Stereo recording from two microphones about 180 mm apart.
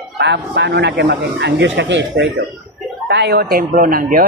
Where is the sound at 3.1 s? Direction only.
65° right (ahead or behind).